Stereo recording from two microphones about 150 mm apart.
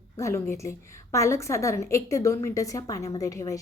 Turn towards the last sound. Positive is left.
turn(degrees=20)  # may be behind; listen again after turning